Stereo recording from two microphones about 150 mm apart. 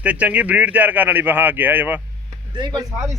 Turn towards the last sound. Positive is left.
turn(degrees=-30)  # may be behind; listen again after turning